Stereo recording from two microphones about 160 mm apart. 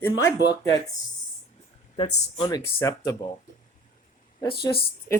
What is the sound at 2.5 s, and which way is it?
Speech, 20° left (ahead or behind).